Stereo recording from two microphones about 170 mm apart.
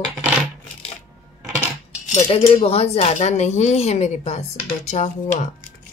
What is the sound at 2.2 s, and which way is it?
Speech, 35° left (ahead or behind).